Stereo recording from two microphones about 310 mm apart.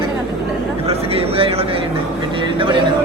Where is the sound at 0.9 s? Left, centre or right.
Centre.